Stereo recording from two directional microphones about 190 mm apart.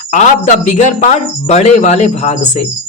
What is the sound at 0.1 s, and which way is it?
Speech, 40° left (ahead or behind).